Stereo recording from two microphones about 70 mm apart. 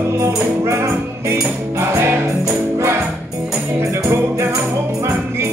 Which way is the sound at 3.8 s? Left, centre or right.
Right.